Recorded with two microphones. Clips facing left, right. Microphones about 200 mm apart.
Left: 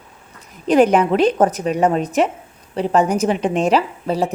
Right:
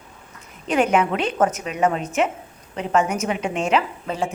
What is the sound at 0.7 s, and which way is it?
A woman's voice, 35° left (ahead or behind).